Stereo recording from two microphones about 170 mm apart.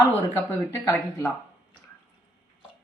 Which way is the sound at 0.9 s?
15° left (ahead or behind).